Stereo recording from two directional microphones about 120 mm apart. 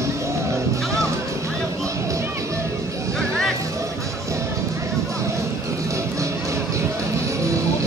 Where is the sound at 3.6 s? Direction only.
25° right (ahead or behind).